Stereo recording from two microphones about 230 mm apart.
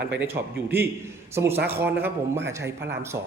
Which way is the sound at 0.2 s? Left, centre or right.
Centre.